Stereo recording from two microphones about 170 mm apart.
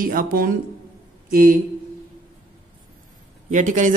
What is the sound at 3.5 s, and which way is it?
Speech, 45° right (ahead or behind).